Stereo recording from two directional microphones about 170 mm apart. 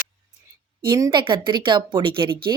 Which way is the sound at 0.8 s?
25° right (ahead or behind).